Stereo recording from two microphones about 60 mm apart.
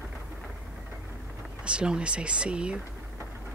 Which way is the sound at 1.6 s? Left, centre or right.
Centre.